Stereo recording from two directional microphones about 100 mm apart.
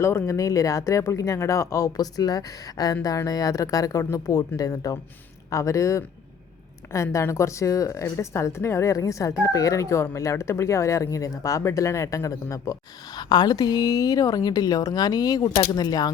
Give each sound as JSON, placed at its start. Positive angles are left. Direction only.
{"t": 0.0, "sound": "speech", "side_deg": 25}
{"t": 13.1, "sound": "speech", "side_deg": 45}